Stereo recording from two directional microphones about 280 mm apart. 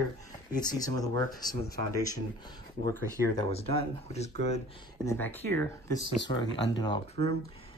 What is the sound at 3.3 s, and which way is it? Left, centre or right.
Speech, left.